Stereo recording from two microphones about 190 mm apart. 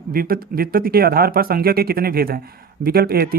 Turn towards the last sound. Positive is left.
turn(degrees=-55)  # may be behind; listen again after turning